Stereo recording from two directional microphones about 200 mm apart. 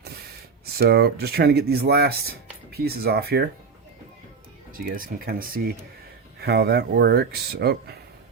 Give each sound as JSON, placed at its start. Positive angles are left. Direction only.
{"t": 0.6, "sound": "speech", "side_deg": -55}
{"t": 4.7, "sound": "speech", "side_deg": -45}